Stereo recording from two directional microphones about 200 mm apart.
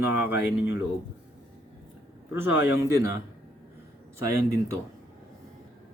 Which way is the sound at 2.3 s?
10° right (ahead or behind).